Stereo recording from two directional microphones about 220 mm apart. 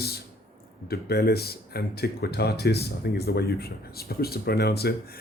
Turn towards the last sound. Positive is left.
turn(degrees=45)  # may be behind; listen again after turning